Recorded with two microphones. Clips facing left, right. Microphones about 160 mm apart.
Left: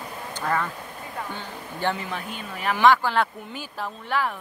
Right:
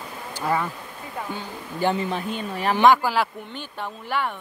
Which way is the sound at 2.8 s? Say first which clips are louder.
Right 1 dB; 10° right (ahead or behind).